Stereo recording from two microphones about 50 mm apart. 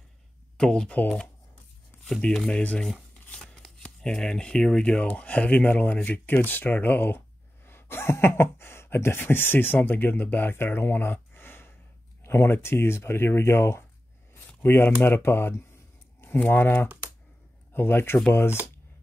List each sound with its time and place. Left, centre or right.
0.6 s speech: centre
2.2 s speech: centre
3.8 s speech: left
12.2 s speech: left